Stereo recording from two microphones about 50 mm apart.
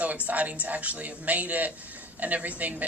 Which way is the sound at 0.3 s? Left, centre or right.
Right.